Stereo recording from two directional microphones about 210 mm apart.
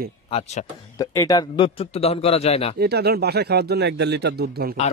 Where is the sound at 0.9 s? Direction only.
15° left (ahead or behind).